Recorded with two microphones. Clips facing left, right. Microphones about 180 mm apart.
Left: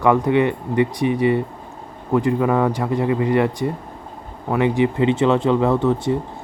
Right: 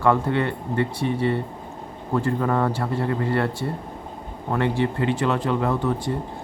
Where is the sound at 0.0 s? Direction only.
15° left (ahead or behind).